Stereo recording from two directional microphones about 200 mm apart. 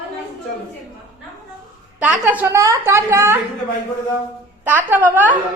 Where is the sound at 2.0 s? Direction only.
10° right (ahead or behind).